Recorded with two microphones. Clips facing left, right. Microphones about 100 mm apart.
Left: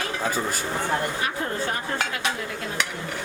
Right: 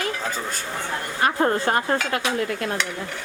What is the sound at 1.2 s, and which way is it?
A woman's voice, 55° right (ahead or behind).